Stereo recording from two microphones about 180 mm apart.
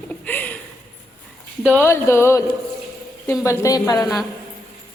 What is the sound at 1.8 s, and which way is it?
Speech, 15° left (ahead or behind).